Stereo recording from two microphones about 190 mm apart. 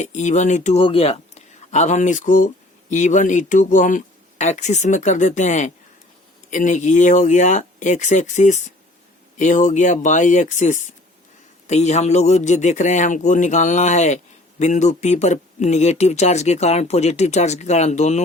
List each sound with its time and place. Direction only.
0.0 s speech: 40° left (ahead or behind)